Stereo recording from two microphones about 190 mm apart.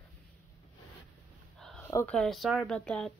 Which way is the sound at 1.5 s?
5° left (ahead or behind).